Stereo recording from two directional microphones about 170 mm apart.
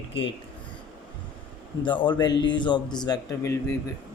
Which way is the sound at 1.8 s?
30° left (ahead or behind).